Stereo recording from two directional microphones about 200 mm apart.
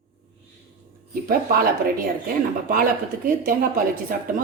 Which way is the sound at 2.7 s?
45° right (ahead or behind).